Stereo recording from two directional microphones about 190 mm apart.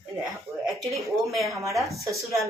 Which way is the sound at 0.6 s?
Centre (ahead or behind).